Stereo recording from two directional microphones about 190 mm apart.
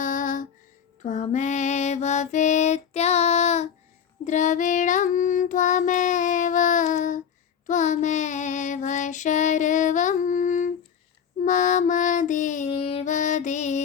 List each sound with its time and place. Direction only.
0.0 s a sound: 45° left (ahead or behind)
1.0 s female singing: 40° left (ahead or behind)
4.2 s child singing: 40° left (ahead or behind)
11.4 s music: 40° left (ahead or behind)